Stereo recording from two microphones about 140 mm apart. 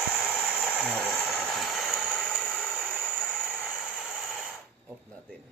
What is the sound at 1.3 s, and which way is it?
Train, centre (ahead or behind).